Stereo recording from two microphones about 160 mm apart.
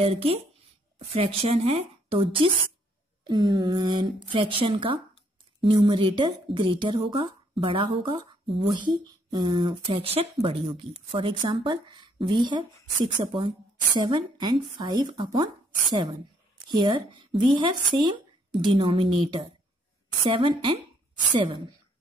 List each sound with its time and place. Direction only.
0.0 s speech: 35° right (ahead or behind)